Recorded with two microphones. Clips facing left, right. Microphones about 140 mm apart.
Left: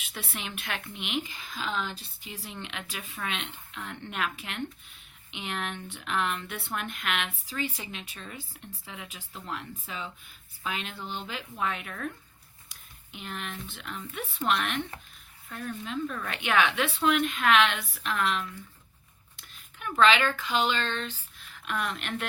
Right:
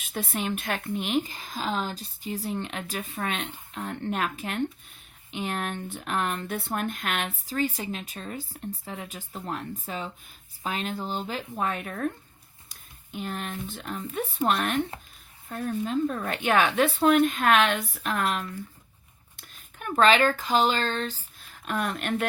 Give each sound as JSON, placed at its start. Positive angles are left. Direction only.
{"t": 0.0, "sound": "speech", "side_deg": -45}